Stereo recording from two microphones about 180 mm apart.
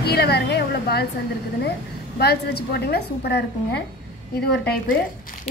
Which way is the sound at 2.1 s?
60° left (ahead or behind).